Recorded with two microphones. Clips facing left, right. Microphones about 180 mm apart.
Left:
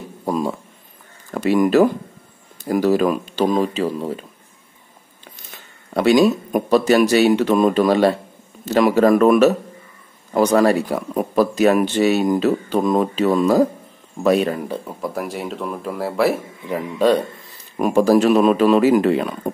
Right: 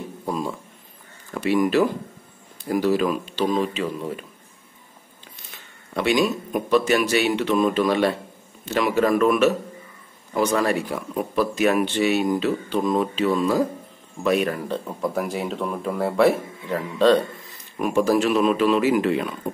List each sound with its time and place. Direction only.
0.2 s a sound: 45° left (ahead or behind)
1.3 s speech: 45° left (ahead or behind)
5.9 s speech: 40° left (ahead or behind)
14.5 s speech: 20° left (ahead or behind)
14.9 s speech: centre (ahead or behind)
17.7 s speech: 40° left (ahead or behind)